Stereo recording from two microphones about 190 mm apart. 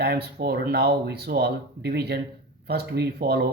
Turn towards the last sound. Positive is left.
turn(degrees=-55)  # may be behind; listen again after turning